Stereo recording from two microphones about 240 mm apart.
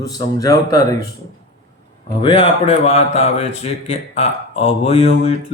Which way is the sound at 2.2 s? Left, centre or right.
Left.